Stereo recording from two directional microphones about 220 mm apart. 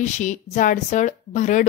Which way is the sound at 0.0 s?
35° left (ahead or behind).